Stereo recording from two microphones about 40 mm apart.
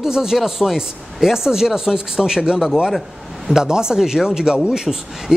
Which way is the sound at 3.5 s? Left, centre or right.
Centre.